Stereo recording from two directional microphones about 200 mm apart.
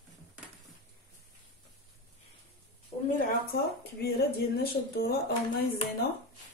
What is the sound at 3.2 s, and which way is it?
Speech, 50° left (ahead or behind).